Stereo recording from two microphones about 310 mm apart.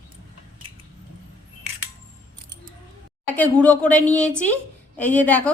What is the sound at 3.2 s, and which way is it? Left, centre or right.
A woman's voice, centre.